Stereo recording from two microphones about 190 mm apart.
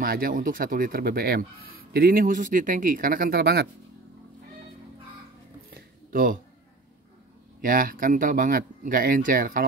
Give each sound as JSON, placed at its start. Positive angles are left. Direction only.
{"t": 0.0, "sound": "speech", "side_deg": -50}
{"t": 5.8, "sound": "a sound", "side_deg": -45}
{"t": 7.6, "sound": "speech", "side_deg": -45}